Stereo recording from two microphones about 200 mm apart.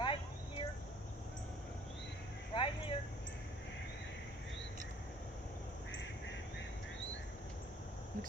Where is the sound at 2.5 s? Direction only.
25° left (ahead or behind).